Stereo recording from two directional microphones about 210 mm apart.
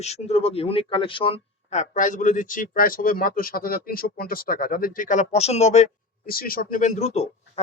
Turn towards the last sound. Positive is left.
turn(degrees=30)  # may be behind; listen again after turning